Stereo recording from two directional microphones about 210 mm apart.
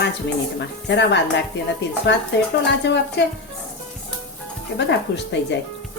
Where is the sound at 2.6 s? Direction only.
55° left (ahead or behind).